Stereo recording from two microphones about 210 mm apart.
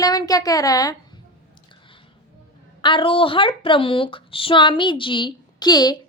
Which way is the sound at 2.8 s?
25° left (ahead or behind).